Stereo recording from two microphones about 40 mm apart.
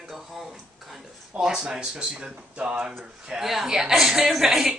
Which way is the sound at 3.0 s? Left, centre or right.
Centre.